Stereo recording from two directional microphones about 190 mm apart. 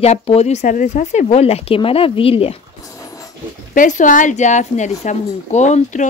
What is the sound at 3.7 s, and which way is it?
Speech, 45° left (ahead or behind).